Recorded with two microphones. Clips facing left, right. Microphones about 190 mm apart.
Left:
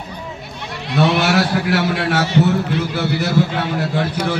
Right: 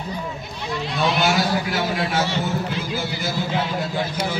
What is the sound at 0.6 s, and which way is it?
A man's voice, 65° left (ahead or behind).